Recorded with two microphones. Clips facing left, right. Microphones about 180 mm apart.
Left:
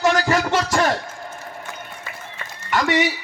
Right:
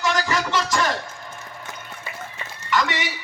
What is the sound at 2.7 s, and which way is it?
Speech, 55° left (ahead or behind).